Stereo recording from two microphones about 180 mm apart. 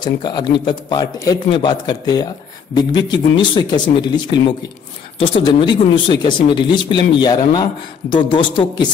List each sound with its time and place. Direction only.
0.0 s speech: 25° left (ahead or behind)